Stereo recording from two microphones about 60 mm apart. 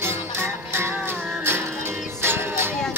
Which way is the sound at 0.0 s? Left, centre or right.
Right.